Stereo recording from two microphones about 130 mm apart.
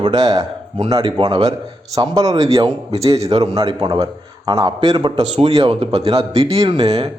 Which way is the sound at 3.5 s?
30° right (ahead or behind).